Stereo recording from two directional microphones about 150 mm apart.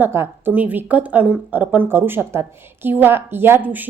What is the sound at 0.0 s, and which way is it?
A woman's voice, 15° right (ahead or behind).